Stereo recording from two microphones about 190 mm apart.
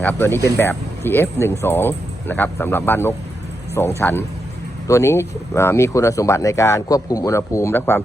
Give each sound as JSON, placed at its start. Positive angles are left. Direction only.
{"t": 0.0, "sound": "speech", "side_deg": 10}